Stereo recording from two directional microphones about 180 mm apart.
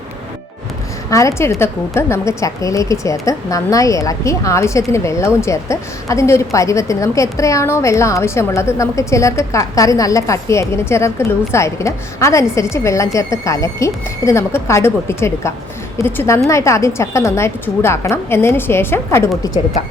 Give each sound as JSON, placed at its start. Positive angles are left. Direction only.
{"t": 1.1, "sound": "a woman's voice", "side_deg": 15}